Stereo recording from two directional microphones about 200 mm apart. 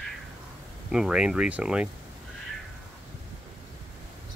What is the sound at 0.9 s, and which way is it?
Speech, 5° right (ahead or behind).